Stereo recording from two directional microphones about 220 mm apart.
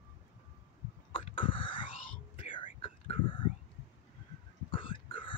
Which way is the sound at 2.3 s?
25° left (ahead or behind).